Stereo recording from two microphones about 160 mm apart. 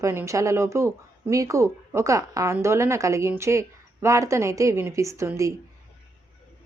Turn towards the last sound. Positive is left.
turn(degrees=-20)  # may be behind; listen again after turning